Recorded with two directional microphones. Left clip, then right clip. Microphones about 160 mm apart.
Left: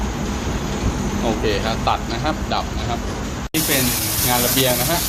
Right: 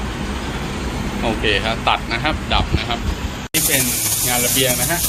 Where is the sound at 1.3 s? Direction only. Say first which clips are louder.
Right 3 dB; 10° left (ahead or behind).